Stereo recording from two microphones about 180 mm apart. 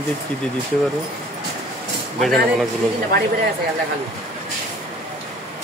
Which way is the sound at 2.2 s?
Centre (ahead or behind).